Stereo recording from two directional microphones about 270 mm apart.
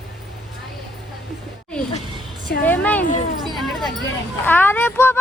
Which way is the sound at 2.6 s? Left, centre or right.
Centre.